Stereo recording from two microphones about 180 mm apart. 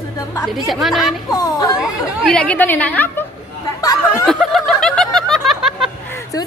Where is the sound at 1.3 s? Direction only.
20° left (ahead or behind).